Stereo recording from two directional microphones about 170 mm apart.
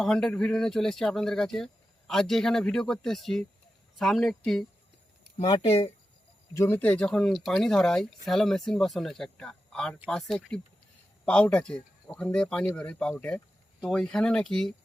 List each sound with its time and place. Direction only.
0.0 s speech: 5° left (ahead or behind)
5.4 s speech: 35° left (ahead or behind)
6.5 s speech: 15° left (ahead or behind)